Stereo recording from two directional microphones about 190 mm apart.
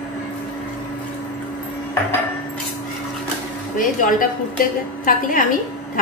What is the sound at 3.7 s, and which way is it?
A woman's voice, 45° left (ahead or behind).